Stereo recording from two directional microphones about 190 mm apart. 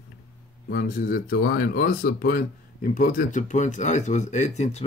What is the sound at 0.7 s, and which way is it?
Speech, 50° left (ahead or behind).